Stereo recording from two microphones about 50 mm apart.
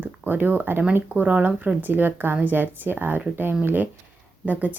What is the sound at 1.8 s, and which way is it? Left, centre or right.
Speech, right.